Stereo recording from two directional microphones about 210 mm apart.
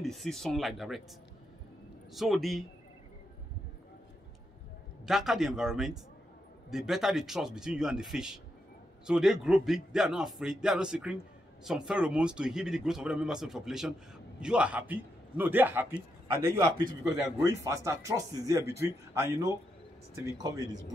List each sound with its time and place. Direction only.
0.0 s a man's voice: centre (ahead or behind)
2.1 s a man's voice: centre (ahead or behind)
5.0 s a man's voice: centre (ahead or behind); by 20.7 s 20° right (ahead or behind)